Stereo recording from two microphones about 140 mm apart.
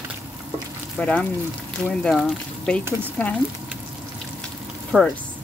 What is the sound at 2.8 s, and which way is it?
Speech, 15° right (ahead or behind).